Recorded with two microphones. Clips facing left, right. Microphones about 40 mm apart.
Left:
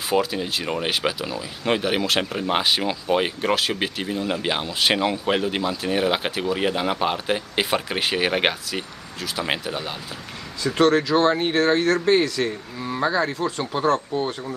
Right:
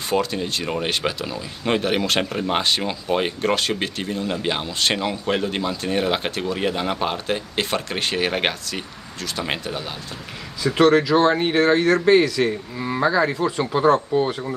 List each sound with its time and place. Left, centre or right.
0.1 s speech: centre
10.6 s speech: centre
13.0 s speech: centre
14.1 s speech: right